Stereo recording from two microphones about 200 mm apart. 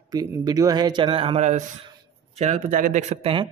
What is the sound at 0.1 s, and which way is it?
Speech, 15° right (ahead or behind).